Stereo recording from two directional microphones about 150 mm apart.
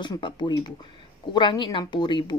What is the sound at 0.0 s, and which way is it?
Speech, 30° left (ahead or behind).